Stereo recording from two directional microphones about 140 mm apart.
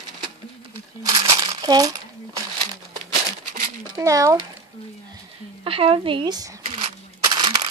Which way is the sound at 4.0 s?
20° right (ahead or behind).